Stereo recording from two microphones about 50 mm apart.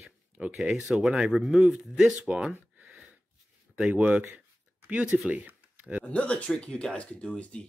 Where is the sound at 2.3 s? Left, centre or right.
Centre.